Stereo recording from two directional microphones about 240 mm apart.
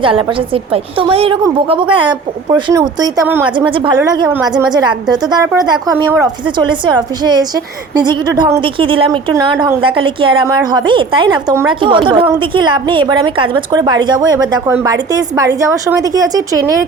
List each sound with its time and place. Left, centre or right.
0.0 s a woman's voice: right; by 4.4 s centre
4.7 s a woman's voice: centre